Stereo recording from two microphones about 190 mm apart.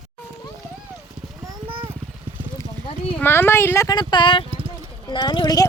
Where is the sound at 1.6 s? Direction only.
30° right (ahead or behind).